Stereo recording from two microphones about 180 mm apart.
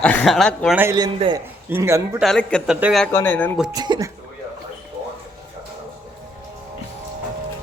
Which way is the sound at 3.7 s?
25° right (ahead or behind).